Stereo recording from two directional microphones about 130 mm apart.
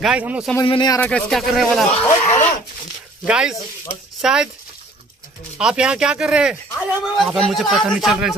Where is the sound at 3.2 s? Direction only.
5° right (ahead or behind).